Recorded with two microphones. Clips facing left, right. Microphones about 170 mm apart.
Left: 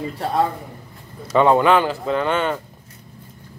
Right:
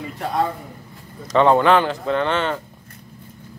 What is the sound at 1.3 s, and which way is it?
A man's voice, 5° left (ahead or behind).